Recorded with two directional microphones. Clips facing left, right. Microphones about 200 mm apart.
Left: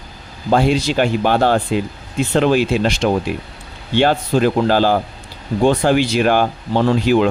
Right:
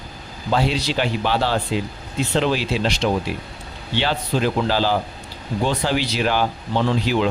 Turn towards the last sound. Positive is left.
turn(degrees=50)  # may be behind; listen again after turning